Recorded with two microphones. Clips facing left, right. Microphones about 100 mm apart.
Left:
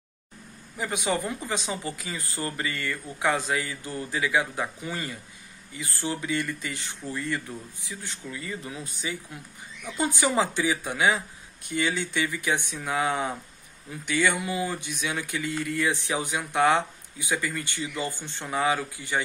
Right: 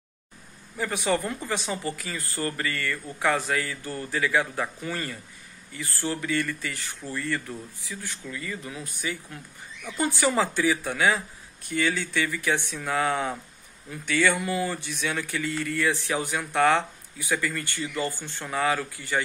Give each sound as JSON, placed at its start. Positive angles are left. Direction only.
{"t": 0.7, "sound": "speech", "side_deg": 15}